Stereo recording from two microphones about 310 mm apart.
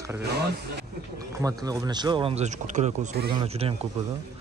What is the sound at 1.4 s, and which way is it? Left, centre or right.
Speech, centre.